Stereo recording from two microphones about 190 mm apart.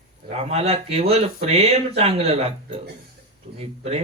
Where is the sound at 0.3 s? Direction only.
35° right (ahead or behind).